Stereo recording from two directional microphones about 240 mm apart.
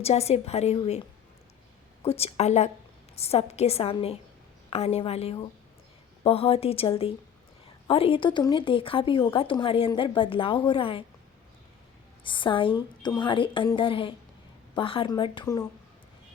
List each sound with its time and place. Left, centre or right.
0.0 s speech: left
2.0 s speech: left
12.2 s speech: left